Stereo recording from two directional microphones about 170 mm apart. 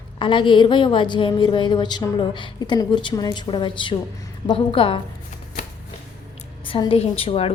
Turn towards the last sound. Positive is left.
turn(degrees=35)  # may be behind; listen again after turning